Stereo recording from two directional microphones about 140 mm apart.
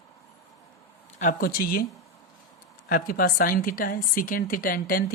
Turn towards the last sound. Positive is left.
turn(degrees=85)